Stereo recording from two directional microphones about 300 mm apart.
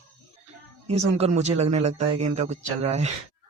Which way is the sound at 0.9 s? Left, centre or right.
Right.